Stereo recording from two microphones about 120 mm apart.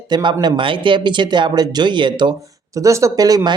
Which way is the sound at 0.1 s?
40° right (ahead or behind).